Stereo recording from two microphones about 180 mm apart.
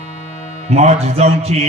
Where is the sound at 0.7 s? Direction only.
35° right (ahead or behind).